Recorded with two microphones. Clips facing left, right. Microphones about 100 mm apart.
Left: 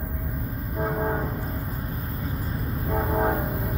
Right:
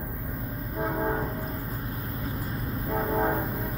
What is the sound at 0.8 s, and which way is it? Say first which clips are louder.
Train: left 2 dB; 10° left (ahead or behind).